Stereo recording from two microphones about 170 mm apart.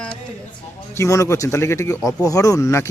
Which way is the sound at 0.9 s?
15° left (ahead or behind).